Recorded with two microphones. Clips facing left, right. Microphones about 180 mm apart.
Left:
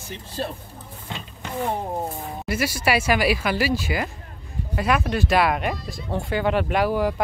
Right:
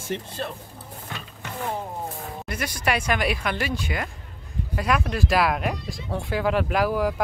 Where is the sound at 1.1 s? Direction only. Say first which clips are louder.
Left 3 dB; 20° left (ahead or behind).